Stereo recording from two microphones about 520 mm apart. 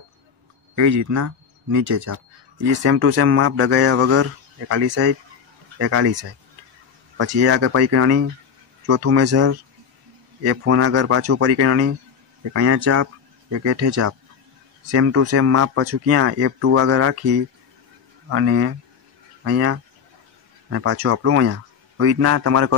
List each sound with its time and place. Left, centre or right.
0.7 s speech: right